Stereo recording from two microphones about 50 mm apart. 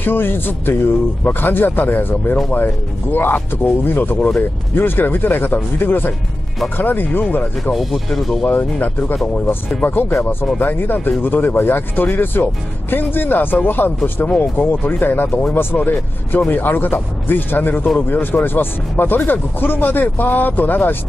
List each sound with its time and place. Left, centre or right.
0.0 s speech: left
7.7 s speech: centre
8.5 s speech: left
9.1 s speech: left
9.8 s speech: left